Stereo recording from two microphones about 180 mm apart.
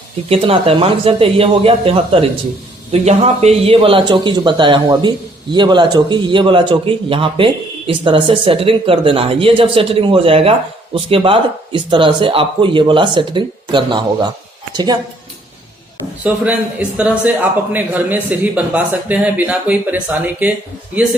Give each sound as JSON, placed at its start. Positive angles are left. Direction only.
{"t": 0.3, "sound": "a woman's voice", "side_deg": -30}
{"t": 16.2, "sound": "speech", "side_deg": -5}